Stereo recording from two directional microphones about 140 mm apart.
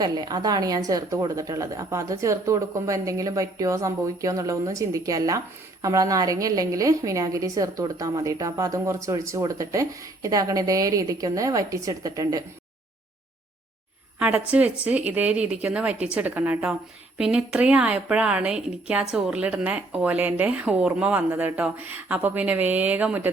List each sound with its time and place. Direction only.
0.0 s a woman's voice: 30° right (ahead or behind)
14.2 s a woman's voice: 10° right (ahead or behind)